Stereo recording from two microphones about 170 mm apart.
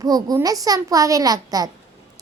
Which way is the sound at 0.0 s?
20° right (ahead or behind).